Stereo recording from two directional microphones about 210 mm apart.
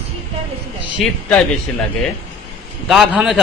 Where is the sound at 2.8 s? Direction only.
Centre (ahead or behind).